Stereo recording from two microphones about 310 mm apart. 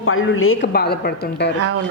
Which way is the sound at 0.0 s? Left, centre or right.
Left.